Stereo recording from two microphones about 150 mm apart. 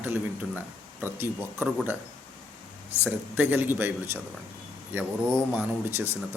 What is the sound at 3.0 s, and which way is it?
Speech, 15° right (ahead or behind).